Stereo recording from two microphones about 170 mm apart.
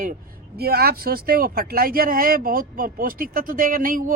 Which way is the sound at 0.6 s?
65° right (ahead or behind).